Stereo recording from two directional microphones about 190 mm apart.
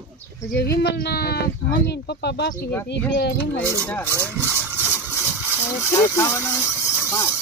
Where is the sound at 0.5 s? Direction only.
60° left (ahead or behind).